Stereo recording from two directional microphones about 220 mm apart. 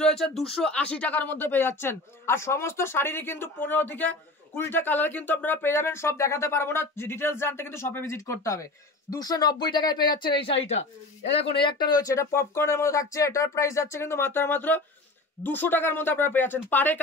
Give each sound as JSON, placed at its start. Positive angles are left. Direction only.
{"t": 0.0, "sound": "speech", "side_deg": 0}